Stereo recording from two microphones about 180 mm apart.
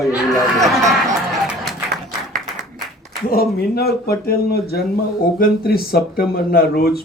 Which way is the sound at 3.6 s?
60° left (ahead or behind).